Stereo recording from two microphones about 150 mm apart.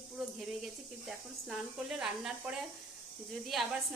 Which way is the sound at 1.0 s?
Centre (ahead or behind).